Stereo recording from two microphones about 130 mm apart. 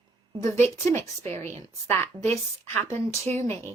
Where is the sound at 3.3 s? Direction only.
55° right (ahead or behind).